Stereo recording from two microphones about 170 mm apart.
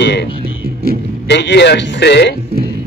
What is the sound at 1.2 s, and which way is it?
A man's voice, 90° left.